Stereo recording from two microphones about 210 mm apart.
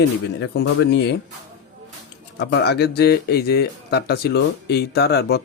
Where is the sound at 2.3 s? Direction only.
55° left (ahead or behind).